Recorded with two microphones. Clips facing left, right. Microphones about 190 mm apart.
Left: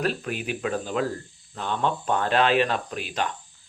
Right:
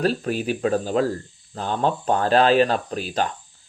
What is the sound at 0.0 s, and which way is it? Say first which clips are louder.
Speech: right 5 dB; 35° right (ahead or behind).